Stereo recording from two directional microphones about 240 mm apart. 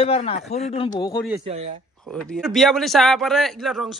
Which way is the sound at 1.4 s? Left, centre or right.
Right.